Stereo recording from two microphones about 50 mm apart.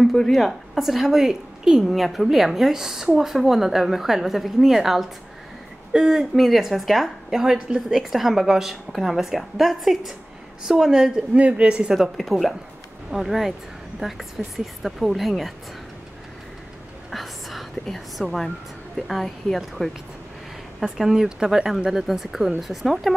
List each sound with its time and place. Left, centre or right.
0.0 s a woman's voice: centre
0.5 s a woman's voice: centre
1.9 s a woman's voice: centre; by 11.9 s right
12.2 s a woman's voice: centre
17.1 s whispering: centre
19.0 s a woman's voice: centre
20.8 s a woman's voice: centre